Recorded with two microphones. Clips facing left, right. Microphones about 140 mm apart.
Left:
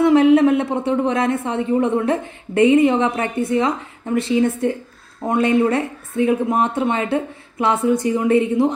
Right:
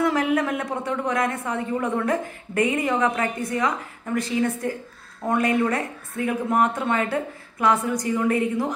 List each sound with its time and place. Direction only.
0.0 s a woman's voice: 25° left (ahead or behind)